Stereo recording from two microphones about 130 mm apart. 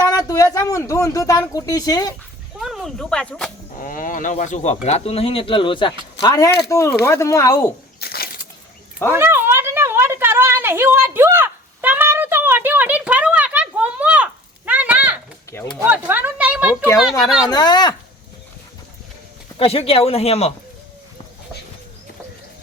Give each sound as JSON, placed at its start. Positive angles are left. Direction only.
{"t": 0.1, "sound": "a sound", "side_deg": 25}
{"t": 0.5, "sound": "speech", "side_deg": 25}
{"t": 2.6, "sound": "speech", "side_deg": 0}
{"t": 3.8, "sound": "speech", "side_deg": 90}
{"t": 4.9, "sound": "speech", "side_deg": 55}
{"t": 9.1, "sound": "a sound", "side_deg": -20}
{"t": 17.0, "sound": "speech", "side_deg": -5}
{"t": 17.5, "sound": "speech", "side_deg": 30}
{"t": 19.5, "sound": "speech", "side_deg": 50}